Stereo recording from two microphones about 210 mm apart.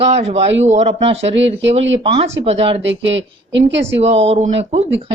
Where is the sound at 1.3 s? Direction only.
60° right (ahead or behind).